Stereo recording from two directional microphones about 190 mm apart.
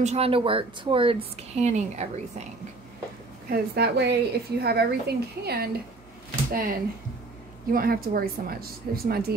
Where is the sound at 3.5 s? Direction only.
60° right (ahead or behind).